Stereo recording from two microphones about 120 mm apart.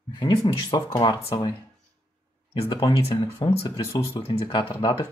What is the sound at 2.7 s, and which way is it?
Speech, 35° left (ahead or behind).